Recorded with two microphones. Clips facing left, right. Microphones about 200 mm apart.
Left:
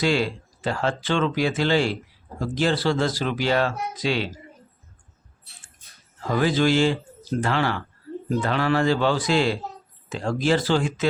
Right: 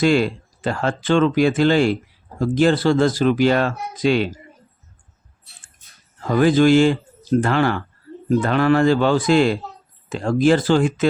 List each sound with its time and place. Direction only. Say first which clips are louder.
0.0 s speech: right 6 dB; 50° right (ahead or behind)
6.4 s speech: right 7 dB; 50° right (ahead or behind)